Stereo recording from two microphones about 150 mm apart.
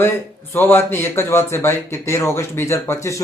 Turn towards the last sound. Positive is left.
turn(degrees=20)  # may be behind; listen again after turning